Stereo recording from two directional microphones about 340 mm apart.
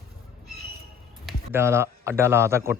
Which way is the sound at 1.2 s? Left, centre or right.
Centre.